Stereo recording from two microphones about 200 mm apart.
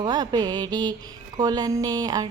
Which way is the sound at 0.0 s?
20° right (ahead or behind).